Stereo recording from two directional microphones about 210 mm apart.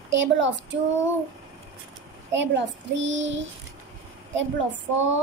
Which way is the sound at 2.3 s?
60° right (ahead or behind).